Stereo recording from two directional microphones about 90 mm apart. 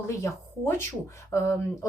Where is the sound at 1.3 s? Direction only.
30° left (ahead or behind).